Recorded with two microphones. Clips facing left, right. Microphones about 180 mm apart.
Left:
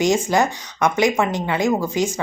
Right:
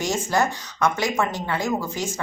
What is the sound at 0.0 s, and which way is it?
A woman's voice, 15° left (ahead or behind).